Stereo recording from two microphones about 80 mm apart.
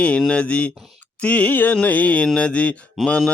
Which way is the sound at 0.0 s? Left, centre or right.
Centre.